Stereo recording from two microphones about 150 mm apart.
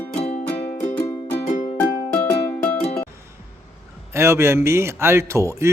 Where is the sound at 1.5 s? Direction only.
50° left (ahead or behind).